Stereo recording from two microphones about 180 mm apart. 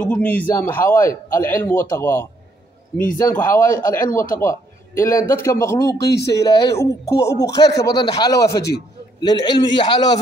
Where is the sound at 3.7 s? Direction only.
50° left (ahead or behind).